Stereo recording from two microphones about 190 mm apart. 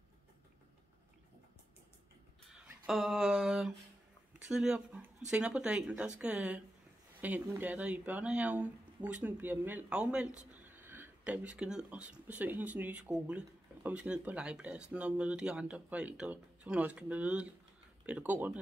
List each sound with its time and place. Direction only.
2.5 s speech: centre (ahead or behind)